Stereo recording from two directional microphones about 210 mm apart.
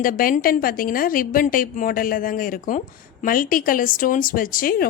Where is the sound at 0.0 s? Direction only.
40° left (ahead or behind).